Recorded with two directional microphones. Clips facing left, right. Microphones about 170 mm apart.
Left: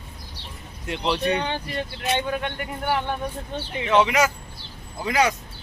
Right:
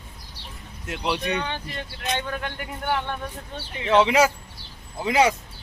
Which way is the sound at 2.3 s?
Centre (ahead or behind).